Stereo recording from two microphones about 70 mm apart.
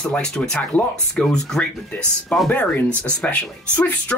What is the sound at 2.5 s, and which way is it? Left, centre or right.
Speech, left.